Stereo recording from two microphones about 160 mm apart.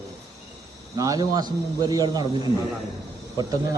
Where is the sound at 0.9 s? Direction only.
20° right (ahead or behind).